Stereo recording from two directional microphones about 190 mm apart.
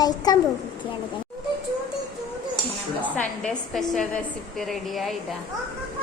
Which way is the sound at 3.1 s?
5° left (ahead or behind).